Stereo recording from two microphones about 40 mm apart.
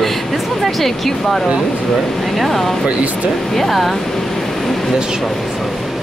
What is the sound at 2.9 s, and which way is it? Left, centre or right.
Speech, right.